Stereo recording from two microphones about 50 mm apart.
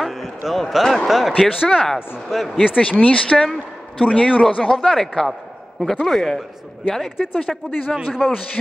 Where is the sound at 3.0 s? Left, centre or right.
Left.